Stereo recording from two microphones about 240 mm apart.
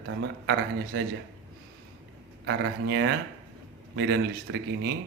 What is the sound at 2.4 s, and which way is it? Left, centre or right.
A man's voice, right.